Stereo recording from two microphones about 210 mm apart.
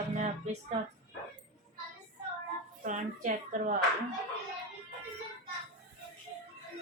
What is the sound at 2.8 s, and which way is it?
Speech, 40° right (ahead or behind).